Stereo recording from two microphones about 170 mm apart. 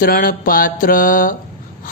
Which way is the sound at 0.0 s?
55° left (ahead or behind).